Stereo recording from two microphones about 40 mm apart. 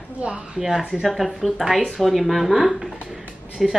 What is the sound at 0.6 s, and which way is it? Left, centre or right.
Speech, centre.